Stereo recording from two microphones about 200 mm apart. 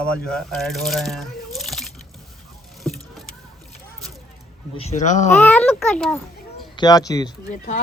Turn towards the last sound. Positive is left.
turn(degrees=45)  # may be behind; listen again after turning